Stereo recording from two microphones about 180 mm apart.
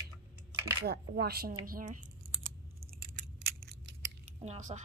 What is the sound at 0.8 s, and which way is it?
A woman's voice, 65° right (ahead or behind).